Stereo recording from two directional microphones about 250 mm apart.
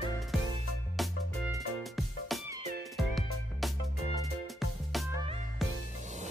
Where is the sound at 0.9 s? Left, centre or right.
Centre.